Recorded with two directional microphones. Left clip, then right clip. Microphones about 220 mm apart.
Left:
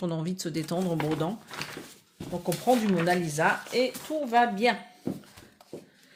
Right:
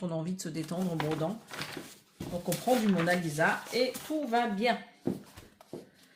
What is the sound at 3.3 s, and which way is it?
Speech, 45° left (ahead or behind).